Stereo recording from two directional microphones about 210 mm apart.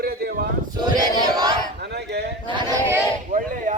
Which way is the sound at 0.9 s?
20° right (ahead or behind).